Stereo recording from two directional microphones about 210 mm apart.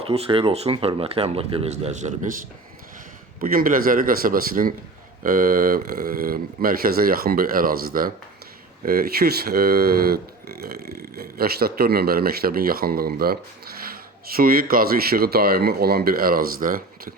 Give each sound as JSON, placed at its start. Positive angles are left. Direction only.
{"t": 0.0, "sound": "speech", "side_deg": -25}
{"t": 3.4, "sound": "speech", "side_deg": -40}